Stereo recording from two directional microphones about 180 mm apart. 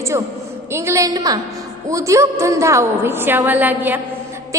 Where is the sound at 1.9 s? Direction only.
15° right (ahead or behind).